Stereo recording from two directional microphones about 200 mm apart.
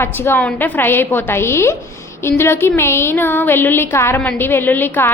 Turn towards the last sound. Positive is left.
turn(degrees=10)  # may be behind; listen again after turning